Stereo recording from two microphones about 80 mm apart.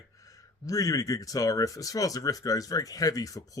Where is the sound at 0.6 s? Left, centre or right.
Left.